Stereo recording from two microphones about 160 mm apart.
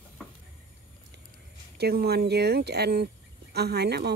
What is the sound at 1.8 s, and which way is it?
Speech, 85° right.